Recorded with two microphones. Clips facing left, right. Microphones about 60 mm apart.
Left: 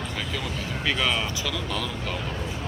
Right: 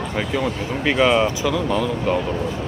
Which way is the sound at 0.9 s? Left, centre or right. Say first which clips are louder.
Right 10 dB; right.